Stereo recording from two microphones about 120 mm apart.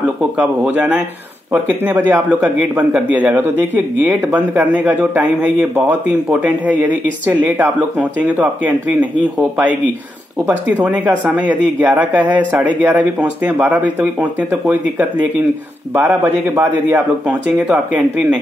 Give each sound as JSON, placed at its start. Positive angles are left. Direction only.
{"t": 0.2, "sound": "speech", "side_deg": -10}
{"t": 10.5, "sound": "speech", "side_deg": -10}